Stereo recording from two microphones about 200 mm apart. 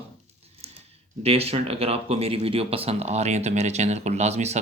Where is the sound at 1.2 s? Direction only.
30° right (ahead or behind).